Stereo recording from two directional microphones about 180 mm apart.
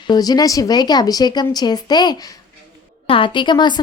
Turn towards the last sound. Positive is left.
turn(degrees=25)  # may be behind; listen again after turning